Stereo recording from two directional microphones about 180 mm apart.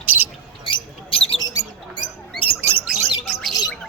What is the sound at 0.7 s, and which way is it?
Bird, 30° left (ahead or behind).